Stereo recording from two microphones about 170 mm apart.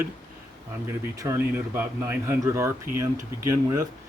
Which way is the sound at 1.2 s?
15° right (ahead or behind).